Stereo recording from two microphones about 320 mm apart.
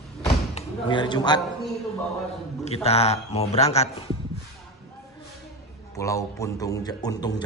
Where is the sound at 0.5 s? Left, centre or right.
Centre.